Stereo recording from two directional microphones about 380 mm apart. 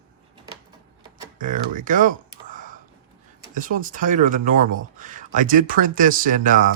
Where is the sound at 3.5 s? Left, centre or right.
Right.